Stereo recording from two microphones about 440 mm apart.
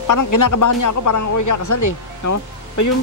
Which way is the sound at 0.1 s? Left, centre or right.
Left.